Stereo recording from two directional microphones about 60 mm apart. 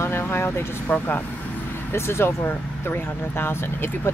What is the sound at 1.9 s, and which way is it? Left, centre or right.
Speech, left.